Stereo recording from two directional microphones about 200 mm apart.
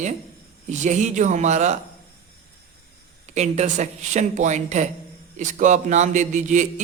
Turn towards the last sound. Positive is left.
turn(degrees=-40)  # may be behind; listen again after turning